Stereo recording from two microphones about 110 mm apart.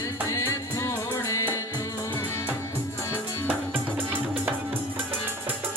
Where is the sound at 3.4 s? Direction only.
15° right (ahead or behind).